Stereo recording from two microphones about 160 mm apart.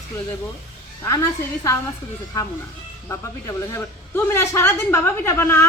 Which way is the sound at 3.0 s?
20° left (ahead or behind).